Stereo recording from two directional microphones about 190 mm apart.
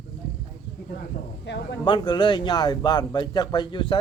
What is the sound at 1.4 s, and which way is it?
Speech, 65° left (ahead or behind).